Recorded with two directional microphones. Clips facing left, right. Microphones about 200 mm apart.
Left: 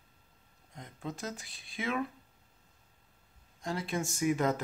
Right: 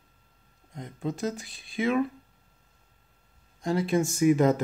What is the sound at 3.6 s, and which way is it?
Speech, 30° right (ahead or behind).